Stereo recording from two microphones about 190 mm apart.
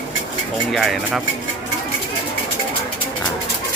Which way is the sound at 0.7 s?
Centre (ahead or behind).